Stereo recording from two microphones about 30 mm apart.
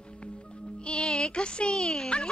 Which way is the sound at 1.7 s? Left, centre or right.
Left.